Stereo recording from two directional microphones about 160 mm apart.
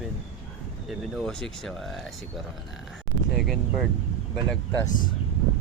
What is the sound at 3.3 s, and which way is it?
Speech, centre (ahead or behind).